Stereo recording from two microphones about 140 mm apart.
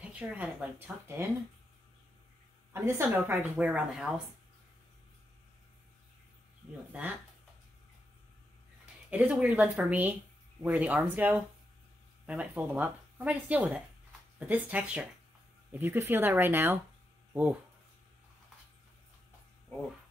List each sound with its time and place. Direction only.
0.0 s speech: 10° right (ahead or behind)
2.7 s speech: 15° right (ahead or behind)
9.1 s speech: 10° right (ahead or behind)